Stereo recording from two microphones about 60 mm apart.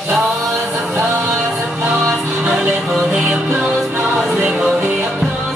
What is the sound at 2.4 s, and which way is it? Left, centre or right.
Music, centre.